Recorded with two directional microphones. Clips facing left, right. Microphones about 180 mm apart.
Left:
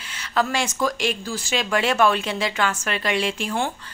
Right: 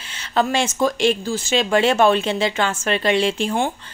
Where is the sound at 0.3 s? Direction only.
25° right (ahead or behind).